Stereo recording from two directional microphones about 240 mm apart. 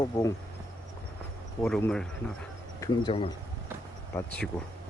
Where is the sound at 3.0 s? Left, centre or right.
Left.